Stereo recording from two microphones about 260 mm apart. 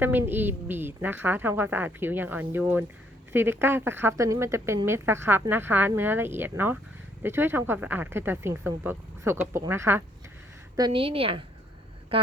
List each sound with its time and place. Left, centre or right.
0.0 s a woman's voice: centre